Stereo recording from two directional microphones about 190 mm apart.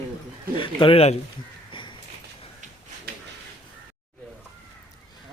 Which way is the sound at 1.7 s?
25° left (ahead or behind).